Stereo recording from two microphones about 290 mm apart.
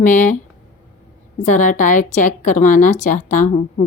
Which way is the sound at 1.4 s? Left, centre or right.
Left.